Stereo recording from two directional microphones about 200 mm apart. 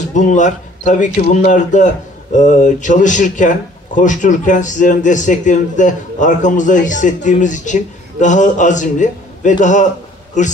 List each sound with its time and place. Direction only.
0.1 s speech: 40° left (ahead or behind)